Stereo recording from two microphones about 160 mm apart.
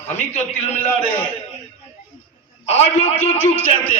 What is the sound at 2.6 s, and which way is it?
Speech, 40° left (ahead or behind).